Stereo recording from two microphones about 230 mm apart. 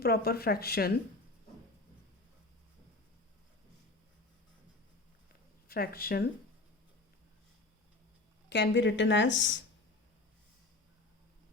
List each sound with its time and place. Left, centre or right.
0.0 s speech: left
5.6 s speech: left
8.4 s speech: left